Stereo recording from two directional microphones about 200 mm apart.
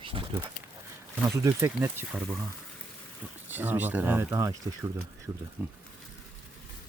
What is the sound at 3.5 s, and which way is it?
Speech, 10° right (ahead or behind).